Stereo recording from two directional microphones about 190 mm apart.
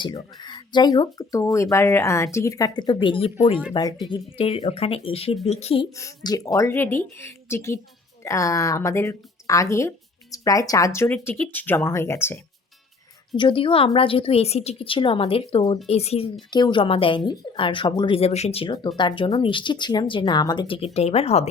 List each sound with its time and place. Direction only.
0.0 s speech: 25° left (ahead or behind)
6.0 s speech: 15° left (ahead or behind)
13.3 s speech: 25° left (ahead or behind)